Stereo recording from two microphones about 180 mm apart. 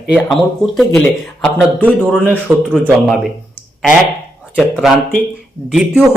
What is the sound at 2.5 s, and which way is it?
Speech, 10° right (ahead or behind).